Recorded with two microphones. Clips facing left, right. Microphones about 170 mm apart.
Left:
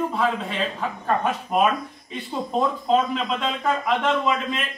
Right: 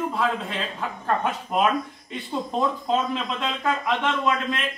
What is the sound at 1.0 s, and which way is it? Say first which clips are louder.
Speech: left 1 dB; centre (ahead or behind).